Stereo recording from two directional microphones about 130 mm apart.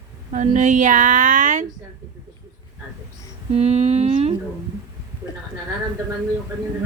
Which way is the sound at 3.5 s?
55° right (ahead or behind).